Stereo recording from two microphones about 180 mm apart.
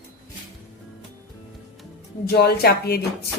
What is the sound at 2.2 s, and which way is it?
Speech, 60° left (ahead or behind).